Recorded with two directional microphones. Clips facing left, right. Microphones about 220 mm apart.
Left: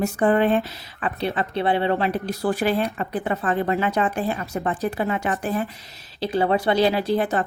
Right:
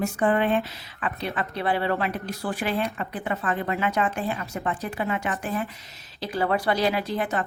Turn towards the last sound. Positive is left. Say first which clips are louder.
# left 5 dB
turn(degrees=35)  # may be behind; listen again after turning